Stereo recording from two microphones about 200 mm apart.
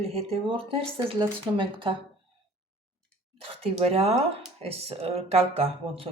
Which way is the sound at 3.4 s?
30° right (ahead or behind).